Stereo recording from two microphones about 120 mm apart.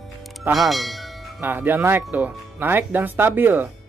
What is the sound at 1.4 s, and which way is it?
A man's voice, 15° right (ahead or behind).